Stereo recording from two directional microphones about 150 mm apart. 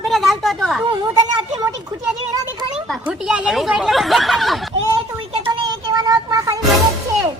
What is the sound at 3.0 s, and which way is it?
Speech, 5° right (ahead or behind).